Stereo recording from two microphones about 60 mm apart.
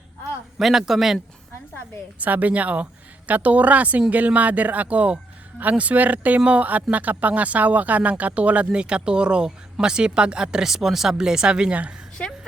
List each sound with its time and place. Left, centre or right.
0.6 s a man's voice: centre
2.1 s speech: right
12.2 s a woman's voice: centre